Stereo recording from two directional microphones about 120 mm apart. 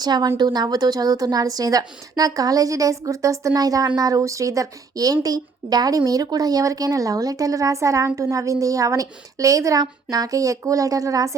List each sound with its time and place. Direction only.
0.0 s a woman's voice: 35° right (ahead or behind)